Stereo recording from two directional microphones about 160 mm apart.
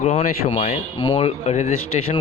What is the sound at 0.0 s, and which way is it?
A man's voice, 45° left (ahead or behind).